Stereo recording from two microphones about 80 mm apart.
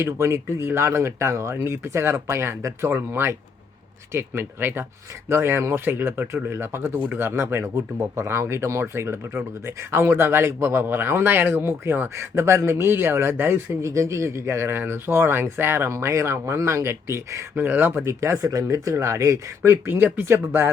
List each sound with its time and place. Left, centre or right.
0.0 s speech: right